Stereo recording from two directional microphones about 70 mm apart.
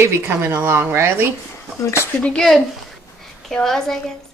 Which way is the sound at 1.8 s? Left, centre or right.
Left.